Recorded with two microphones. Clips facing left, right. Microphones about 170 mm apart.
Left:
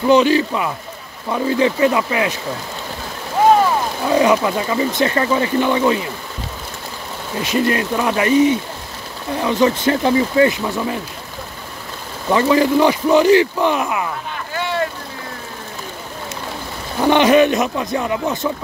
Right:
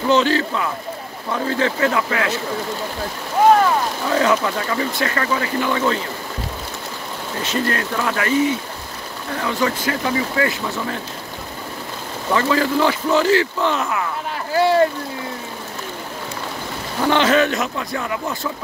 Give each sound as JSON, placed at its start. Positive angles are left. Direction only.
{"t": 0.1, "sound": "speech", "side_deg": 15}
{"t": 4.1, "sound": "speech", "side_deg": 15}
{"t": 7.4, "sound": "speech", "side_deg": 15}
{"t": 12.3, "sound": "speech", "side_deg": 20}
{"t": 14.5, "sound": "boat", "side_deg": -35}
{"t": 17.0, "sound": "speech", "side_deg": 15}